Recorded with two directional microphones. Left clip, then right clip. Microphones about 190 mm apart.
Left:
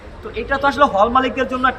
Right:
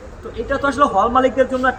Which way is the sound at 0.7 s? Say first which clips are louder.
Even; 15° left (ahead or behind).